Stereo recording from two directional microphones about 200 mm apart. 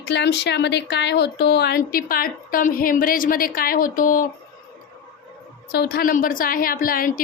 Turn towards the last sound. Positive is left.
turn(degrees=45)  # may be behind; listen again after turning